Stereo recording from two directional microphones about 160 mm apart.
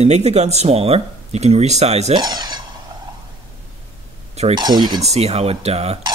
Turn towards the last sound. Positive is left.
turn(degrees=-40)  # may be behind; listen again after turning